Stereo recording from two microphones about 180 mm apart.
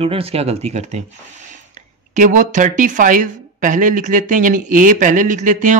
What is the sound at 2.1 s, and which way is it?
A woman's voice, 45° right (ahead or behind).